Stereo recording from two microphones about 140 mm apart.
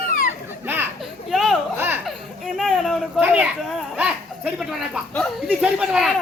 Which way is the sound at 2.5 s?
Centre (ahead or behind).